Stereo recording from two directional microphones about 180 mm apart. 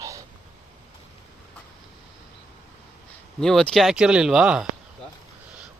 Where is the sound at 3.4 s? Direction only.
5° left (ahead or behind).